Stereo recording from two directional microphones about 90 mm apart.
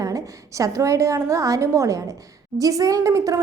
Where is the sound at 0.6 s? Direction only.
35° right (ahead or behind).